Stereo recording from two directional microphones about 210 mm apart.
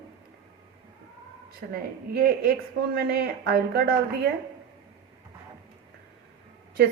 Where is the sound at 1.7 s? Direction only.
45° right (ahead or behind).